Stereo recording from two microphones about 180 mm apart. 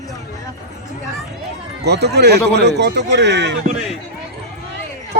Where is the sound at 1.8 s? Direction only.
65° right (ahead or behind).